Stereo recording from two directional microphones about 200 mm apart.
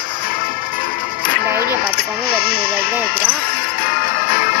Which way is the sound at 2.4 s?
50° left (ahead or behind).